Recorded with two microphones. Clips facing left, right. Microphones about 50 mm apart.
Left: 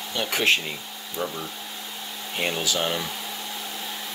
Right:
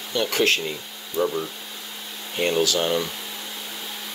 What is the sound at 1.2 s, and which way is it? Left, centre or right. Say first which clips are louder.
Speech: right 7 dB; right.